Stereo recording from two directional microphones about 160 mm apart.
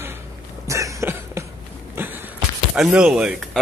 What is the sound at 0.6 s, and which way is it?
Cough, 20° right (ahead or behind).